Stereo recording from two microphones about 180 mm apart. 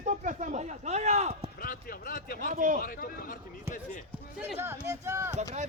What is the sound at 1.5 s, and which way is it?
Speech, 50° left (ahead or behind).